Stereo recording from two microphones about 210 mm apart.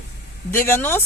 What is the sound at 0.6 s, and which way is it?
Speech, 10° left (ahead or behind).